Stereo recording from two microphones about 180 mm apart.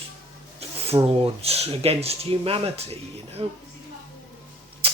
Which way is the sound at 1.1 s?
30° right (ahead or behind).